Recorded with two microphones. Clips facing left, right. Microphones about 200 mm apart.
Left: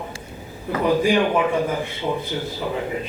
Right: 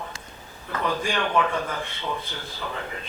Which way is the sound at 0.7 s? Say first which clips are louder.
Left 9 dB; 15° left (ahead or behind).